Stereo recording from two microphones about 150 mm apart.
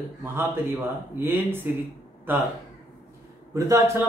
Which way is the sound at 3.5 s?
20° right (ahead or behind).